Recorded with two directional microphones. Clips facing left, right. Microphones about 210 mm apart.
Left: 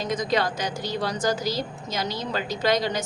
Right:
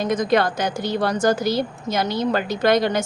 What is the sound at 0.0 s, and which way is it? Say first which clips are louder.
A woman's voice: right 6 dB; 55° right (ahead or behind).